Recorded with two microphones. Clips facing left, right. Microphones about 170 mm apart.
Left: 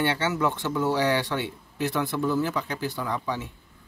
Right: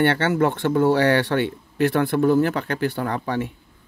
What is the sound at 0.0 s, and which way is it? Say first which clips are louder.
Speech: right 6 dB; 60° right (ahead or behind).